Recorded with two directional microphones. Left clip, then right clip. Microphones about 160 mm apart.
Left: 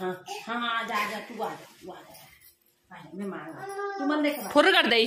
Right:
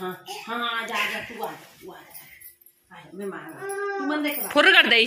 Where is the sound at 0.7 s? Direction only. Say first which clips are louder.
Right 2 dB; 5° left (ahead or behind).